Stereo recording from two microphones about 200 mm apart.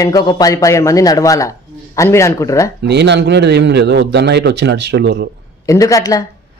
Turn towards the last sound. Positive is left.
turn(degrees=15)  # may be behind; listen again after turning